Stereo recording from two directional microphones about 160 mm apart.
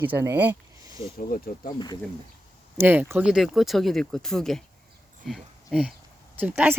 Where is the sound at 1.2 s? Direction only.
65° left (ahead or behind).